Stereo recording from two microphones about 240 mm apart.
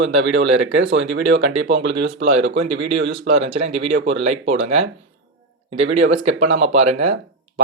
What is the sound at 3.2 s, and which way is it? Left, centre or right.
Speech, right.